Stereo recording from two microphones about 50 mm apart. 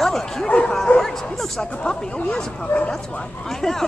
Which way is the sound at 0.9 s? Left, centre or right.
Centre.